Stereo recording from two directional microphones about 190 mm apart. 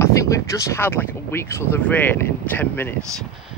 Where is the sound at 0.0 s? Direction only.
15° left (ahead or behind).